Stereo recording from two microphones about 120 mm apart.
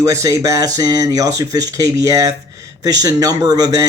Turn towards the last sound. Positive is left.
turn(degrees=-30)  # may be behind; listen again after turning